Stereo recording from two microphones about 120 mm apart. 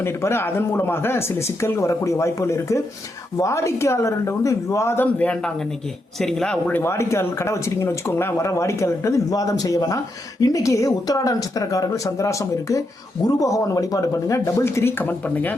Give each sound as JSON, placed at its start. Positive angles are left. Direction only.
{"t": 0.0, "sound": "speech", "side_deg": 20}
{"t": 6.1, "sound": "speech", "side_deg": 5}
{"t": 6.8, "sound": "speech", "side_deg": 20}